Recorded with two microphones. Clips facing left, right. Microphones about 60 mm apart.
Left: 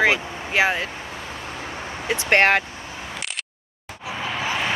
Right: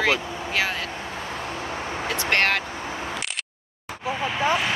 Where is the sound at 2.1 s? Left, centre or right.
Left.